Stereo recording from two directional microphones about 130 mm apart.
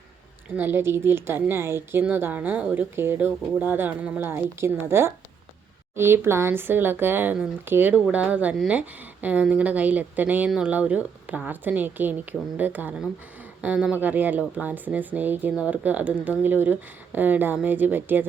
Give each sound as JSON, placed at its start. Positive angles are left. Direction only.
{"t": 0.5, "sound": "speech", "side_deg": -15}